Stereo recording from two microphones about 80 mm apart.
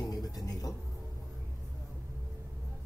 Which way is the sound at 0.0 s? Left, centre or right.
Left.